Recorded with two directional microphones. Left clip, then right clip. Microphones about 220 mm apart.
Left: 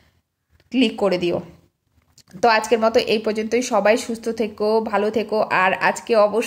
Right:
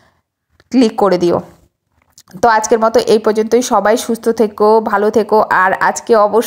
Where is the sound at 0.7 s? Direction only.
5° right (ahead or behind).